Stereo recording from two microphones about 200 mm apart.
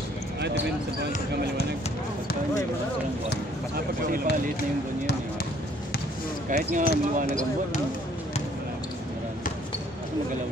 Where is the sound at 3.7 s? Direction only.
45° right (ahead or behind).